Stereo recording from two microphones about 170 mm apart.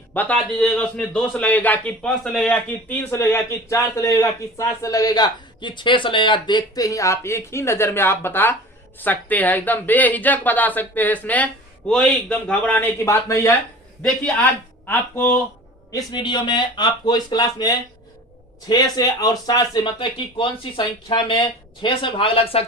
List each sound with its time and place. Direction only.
0.1 s a man's voice: 10° left (ahead or behind)
14.8 s a man's voice: 10° left (ahead or behind)
15.9 s speech: 25° left (ahead or behind)